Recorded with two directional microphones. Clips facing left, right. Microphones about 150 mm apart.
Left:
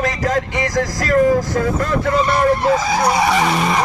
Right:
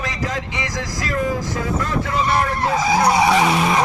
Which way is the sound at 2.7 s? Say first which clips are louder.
Even; 15° right (ahead or behind).